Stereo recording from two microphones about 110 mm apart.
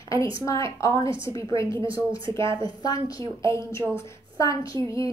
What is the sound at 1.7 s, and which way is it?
Speech, 45° right (ahead or behind).